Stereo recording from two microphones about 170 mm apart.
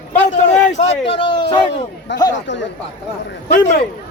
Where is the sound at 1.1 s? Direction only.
30° left (ahead or behind).